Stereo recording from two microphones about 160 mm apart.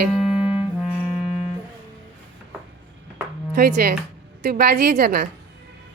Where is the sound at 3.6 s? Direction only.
80° right.